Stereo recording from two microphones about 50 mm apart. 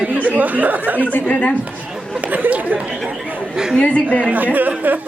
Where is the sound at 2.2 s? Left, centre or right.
Right.